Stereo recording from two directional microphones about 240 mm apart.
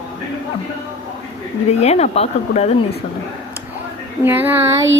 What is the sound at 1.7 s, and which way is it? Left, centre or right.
Speech, left.